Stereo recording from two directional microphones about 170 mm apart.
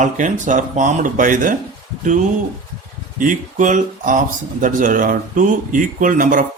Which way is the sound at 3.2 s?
50° right (ahead or behind).